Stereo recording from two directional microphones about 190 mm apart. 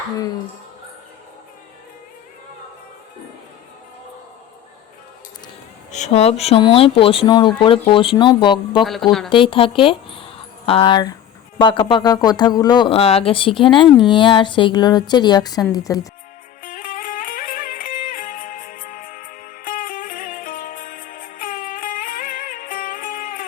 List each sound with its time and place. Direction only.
5.9 s speech: 35° left (ahead or behind)
8.8 s speech: centre (ahead or behind)
9.3 s speech: 25° left (ahead or behind)
16.6 s music: 45° left (ahead or behind)